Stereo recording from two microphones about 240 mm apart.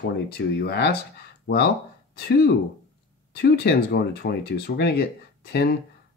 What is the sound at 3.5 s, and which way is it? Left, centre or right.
Speech, left.